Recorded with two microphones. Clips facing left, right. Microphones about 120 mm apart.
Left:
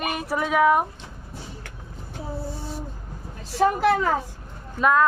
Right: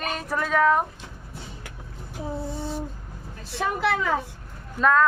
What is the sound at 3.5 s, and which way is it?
Speech, 40° left (ahead or behind).